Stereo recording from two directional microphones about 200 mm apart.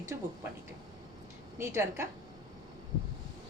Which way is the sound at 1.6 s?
15° right (ahead or behind).